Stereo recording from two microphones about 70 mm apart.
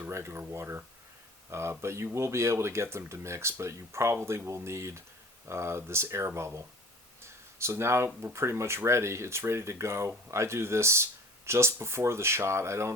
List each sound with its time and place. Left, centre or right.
0.1 s speech: right
7.6 s speech: right